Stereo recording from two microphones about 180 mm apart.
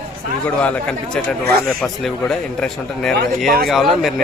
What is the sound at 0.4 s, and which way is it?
A man's voice, 5° left (ahead or behind).